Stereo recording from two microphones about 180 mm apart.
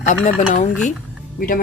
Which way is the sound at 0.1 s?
45° left (ahead or behind).